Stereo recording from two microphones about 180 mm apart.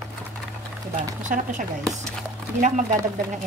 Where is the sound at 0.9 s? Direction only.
45° right (ahead or behind).